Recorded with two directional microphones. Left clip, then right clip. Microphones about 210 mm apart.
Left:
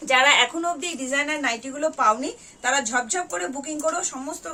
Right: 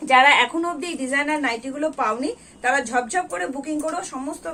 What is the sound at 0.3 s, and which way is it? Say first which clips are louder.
A woman's voice: right 2 dB; 15° left (ahead or behind).